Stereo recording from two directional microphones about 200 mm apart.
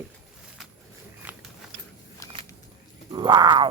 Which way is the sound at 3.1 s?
20° right (ahead or behind).